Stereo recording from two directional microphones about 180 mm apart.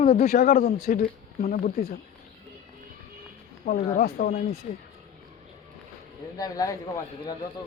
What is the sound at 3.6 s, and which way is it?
Speech, 50° left (ahead or behind).